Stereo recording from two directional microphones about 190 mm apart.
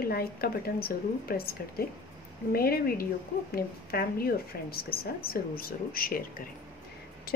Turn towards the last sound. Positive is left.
turn(degrees=50)  # may be behind; listen again after turning